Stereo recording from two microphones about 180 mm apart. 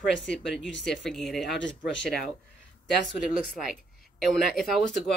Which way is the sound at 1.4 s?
75° left (ahead or behind).